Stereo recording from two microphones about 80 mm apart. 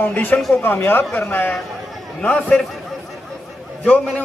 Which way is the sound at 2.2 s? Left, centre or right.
Centre.